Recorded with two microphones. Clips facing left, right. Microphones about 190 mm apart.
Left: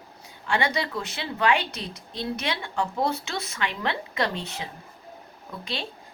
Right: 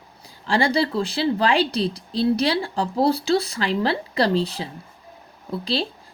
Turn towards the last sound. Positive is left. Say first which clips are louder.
# right 9 dB
turn(degrees=-35)  # may be behind; listen again after turning